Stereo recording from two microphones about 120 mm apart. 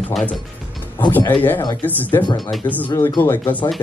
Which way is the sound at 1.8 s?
15° left (ahead or behind).